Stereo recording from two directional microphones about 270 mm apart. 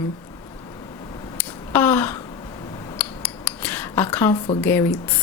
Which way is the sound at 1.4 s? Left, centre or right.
Centre.